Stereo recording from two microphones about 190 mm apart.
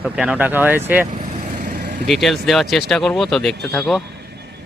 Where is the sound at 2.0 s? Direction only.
Centre (ahead or behind).